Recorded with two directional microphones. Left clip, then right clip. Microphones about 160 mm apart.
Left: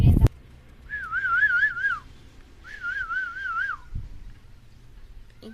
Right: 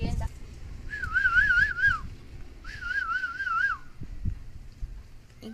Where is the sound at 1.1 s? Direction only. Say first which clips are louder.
Even; 30° left (ahead or behind).